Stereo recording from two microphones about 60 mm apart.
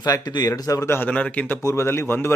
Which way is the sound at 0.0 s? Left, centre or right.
Left.